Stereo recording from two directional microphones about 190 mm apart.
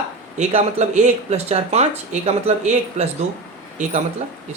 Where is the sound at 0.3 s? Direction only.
40° right (ahead or behind).